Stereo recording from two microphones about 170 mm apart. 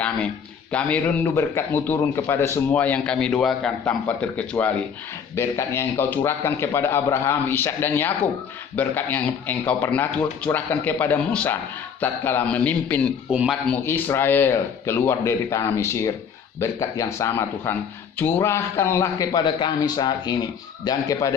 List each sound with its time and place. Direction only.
0.7 s a man's voice: 5° left (ahead or behind)
13.3 s speech: 5° right (ahead or behind)
13.7 s a man's voice: 10° left (ahead or behind)